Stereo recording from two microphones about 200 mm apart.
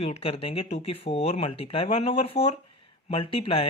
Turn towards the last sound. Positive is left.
turn(degrees=30)  # may be behind; listen again after turning